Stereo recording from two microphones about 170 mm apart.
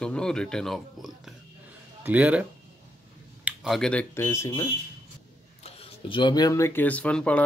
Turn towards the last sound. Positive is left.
turn(degrees=10)  # may be behind; listen again after turning